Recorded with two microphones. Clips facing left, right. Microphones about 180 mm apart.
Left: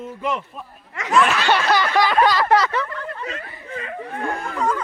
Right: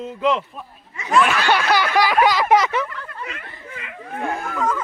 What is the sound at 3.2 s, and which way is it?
Speech, 40° left (ahead or behind).